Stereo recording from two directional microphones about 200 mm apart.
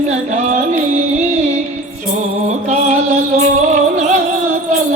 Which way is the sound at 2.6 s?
40° right (ahead or behind).